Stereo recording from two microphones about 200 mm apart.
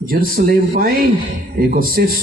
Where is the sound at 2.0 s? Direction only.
50° right (ahead or behind).